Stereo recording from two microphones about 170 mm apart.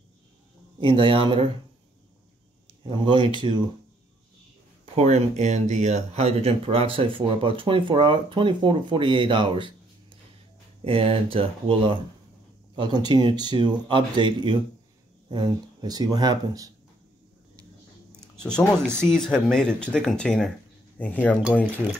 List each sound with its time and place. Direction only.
0.7 s speech: 30° right (ahead or behind)
2.8 s speech: 30° right (ahead or behind)
4.9 s speech: 40° right (ahead or behind)
10.8 s speech: 35° right (ahead or behind)
18.2 s speech: 5° left (ahead or behind)